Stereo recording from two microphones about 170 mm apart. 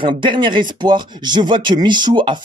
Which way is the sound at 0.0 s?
30° right (ahead or behind).